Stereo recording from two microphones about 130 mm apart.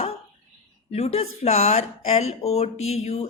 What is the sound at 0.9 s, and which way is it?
Speech, 55° left (ahead or behind).